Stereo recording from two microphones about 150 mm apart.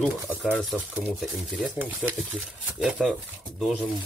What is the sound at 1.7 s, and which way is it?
Speech, 10° right (ahead or behind).